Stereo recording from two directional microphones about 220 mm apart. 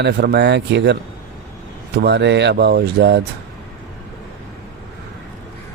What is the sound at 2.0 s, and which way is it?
Speech, 50° right (ahead or behind).